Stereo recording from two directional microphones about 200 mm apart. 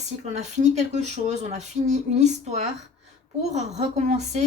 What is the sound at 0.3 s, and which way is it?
Speech, 35° right (ahead or behind).